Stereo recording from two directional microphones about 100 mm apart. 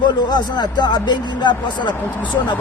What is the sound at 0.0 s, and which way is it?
Speech, 50° left (ahead or behind).